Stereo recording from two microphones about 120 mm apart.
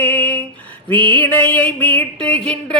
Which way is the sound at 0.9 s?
40° right (ahead or behind).